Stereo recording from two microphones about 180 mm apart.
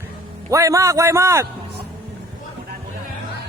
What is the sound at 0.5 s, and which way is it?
Speech, 15° right (ahead or behind).